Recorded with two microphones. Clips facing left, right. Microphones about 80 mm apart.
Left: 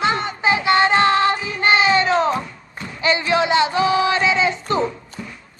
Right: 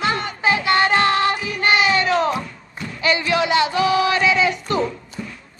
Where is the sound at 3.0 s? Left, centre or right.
Left.